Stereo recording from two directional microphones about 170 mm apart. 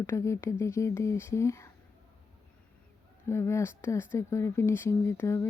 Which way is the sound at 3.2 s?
15° left (ahead or behind).